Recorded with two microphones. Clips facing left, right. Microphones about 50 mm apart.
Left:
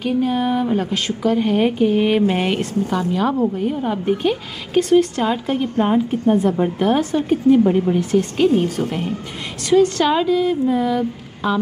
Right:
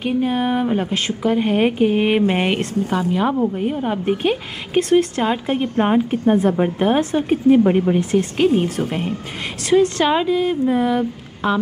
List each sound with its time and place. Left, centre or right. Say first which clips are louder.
0.0 s a woman's voice: even; centre
7.5 s speech: right 1 dB; right
8.1 s speech: left 3 dB; centre
9.7 s a woman's voice: left 1 dB; centre